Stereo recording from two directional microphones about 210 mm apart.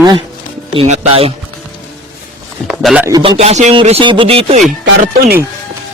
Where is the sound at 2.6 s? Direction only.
5° right (ahead or behind).